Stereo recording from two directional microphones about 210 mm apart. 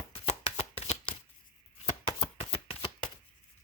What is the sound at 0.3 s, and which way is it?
Shuffling cards, 30° left (ahead or behind).